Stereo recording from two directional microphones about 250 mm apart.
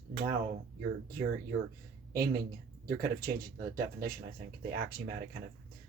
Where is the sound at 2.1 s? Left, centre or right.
Right.